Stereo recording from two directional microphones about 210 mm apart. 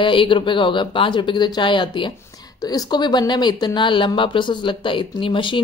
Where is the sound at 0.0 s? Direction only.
25° left (ahead or behind).